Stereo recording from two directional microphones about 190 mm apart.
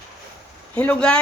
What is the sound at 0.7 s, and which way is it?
Speech, 5° left (ahead or behind).